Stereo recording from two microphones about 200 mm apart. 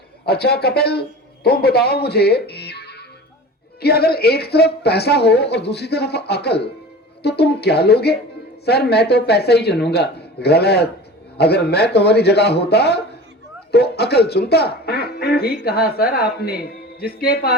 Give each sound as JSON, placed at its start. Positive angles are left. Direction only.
{"t": 0.3, "sound": "a woman's voice", "side_deg": 50}